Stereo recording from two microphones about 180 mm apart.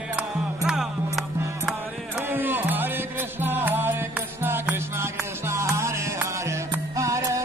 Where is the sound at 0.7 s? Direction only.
5° right (ahead or behind).